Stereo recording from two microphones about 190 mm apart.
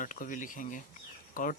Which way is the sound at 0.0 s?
45° left (ahead or behind).